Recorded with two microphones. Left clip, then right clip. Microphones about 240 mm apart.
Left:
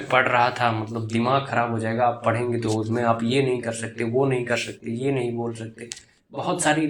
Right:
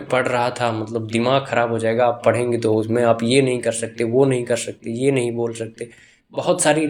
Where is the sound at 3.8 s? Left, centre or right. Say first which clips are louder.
Right 6 dB; right.